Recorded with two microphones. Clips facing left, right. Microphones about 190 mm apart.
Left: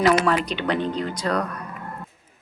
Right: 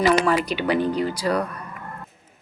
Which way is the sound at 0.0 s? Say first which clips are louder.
Even; 5° right (ahead or behind).